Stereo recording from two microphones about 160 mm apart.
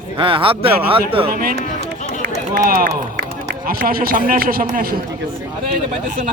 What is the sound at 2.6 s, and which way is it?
A man's voice, 65° right (ahead or behind).